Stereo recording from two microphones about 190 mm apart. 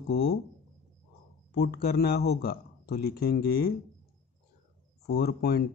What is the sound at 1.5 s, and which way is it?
Speech, 60° left (ahead or behind).